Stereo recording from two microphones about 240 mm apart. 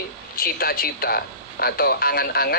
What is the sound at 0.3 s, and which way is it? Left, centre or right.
Speech, left.